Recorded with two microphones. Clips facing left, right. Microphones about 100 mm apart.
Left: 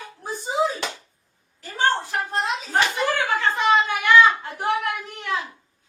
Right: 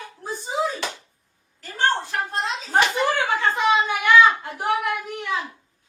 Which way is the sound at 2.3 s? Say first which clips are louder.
Left 2 dB; 15° left (ahead or behind).